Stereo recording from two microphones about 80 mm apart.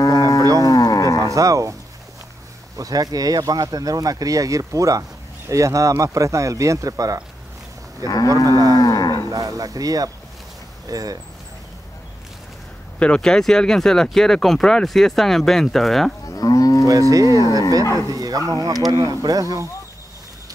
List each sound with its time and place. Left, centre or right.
0.0 s cattle: left
0.6 s livestock: left
1.3 s speech: right
2.8 s speech: right
8.0 s cattle: left
8.5 s speech: right
8.7 s moo: left
9.3 s speech: right
13.0 s speech: centre
16.3 s moo: left
17.1 s speech: right